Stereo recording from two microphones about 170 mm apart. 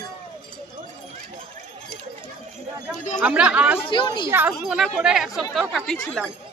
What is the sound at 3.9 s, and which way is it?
Speech, 25° left (ahead or behind).